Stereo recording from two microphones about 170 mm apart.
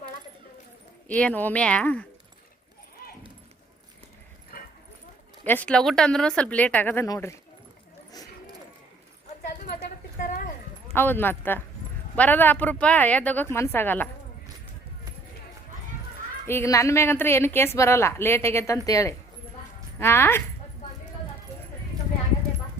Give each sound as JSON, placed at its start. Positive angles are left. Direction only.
{"t": 1.0, "sound": "a woman's voice", "side_deg": 10}
{"t": 3.0, "sound": "horse", "side_deg": 60}
{"t": 5.5, "sound": "a woman's voice", "side_deg": 10}
{"t": 10.2, "sound": "clip-clop", "side_deg": 55}
{"t": 10.9, "sound": "a woman's voice", "side_deg": 10}
{"t": 16.5, "sound": "a woman's voice", "side_deg": 15}